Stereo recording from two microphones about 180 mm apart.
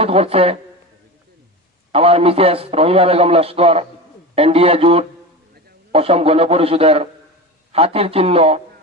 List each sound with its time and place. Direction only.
0.0 s a man's voice: 35° right (ahead or behind)
1.9 s a man's voice: 35° right (ahead or behind)